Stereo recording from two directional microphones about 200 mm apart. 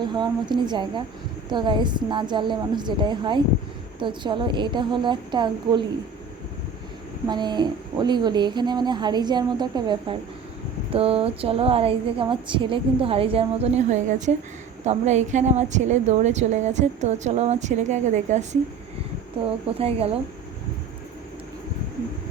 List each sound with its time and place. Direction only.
0.0 s a woman's voice: 20° right (ahead or behind)
7.3 s a woman's voice: 20° right (ahead or behind)
19.8 s a woman's voice: 30° right (ahead or behind)